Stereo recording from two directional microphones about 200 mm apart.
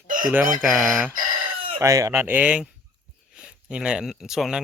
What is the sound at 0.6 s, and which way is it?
Speech, centre (ahead or behind).